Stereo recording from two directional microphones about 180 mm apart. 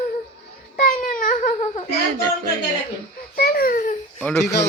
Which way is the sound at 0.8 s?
45° left (ahead or behind).